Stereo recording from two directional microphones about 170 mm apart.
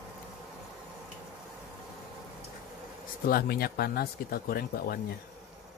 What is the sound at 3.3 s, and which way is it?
Speech, 65° left (ahead or behind).